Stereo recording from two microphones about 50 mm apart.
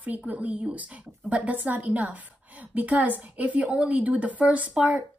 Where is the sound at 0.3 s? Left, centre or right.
Right.